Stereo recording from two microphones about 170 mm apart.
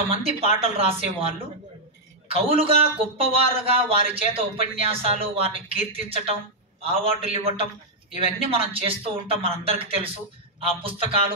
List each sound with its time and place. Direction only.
0.1 s speech: 35° right (ahead or behind)
2.4 s speech: 35° right (ahead or behind)